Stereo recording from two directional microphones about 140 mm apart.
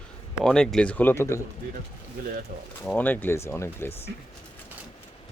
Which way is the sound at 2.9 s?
15° left (ahead or behind).